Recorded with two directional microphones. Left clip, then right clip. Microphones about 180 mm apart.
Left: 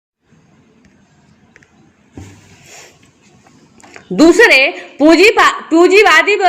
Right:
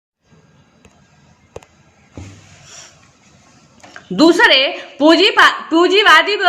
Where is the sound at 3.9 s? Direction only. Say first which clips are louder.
Left 3 dB; 10° left (ahead or behind).